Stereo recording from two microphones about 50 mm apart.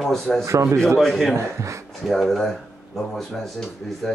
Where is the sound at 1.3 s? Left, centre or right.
Right.